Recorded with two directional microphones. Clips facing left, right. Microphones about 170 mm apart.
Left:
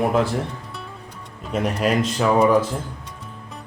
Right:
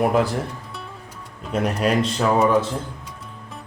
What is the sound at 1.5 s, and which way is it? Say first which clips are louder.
Speech: even; centre (ahead or behind).